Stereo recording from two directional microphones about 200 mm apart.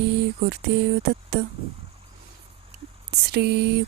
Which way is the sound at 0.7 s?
55° right (ahead or behind).